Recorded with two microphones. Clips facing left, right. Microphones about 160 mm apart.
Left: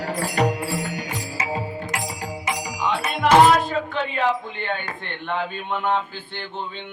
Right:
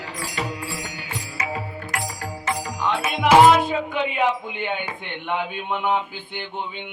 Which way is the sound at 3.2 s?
10° right (ahead or behind).